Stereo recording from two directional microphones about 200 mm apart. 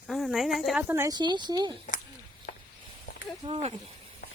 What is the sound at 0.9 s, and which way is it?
Speech, 15° right (ahead or behind).